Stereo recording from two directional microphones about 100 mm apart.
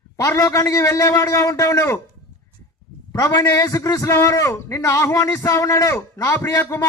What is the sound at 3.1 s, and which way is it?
A man's voice, 35° left (ahead or behind).